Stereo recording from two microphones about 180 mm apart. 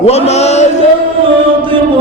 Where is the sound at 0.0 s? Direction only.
35° left (ahead or behind).